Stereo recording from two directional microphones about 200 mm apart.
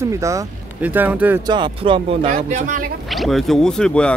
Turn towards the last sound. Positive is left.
turn(degrees=5)  # may be behind; listen again after turning